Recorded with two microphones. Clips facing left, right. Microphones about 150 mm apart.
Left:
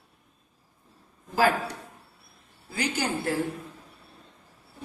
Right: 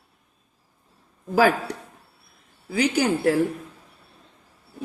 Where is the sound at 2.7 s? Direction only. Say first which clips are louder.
Right 7 dB; 75° right (ahead or behind).